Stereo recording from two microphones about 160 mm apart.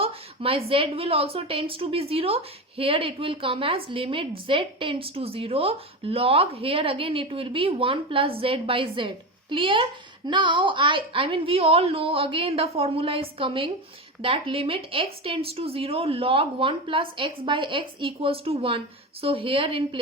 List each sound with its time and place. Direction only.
0.0 s a woman's voice: 35° right (ahead or behind)